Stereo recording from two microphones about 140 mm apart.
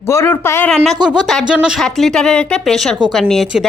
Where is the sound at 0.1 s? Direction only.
20° left (ahead or behind).